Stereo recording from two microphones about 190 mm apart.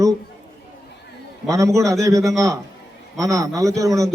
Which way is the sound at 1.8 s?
15° right (ahead or behind).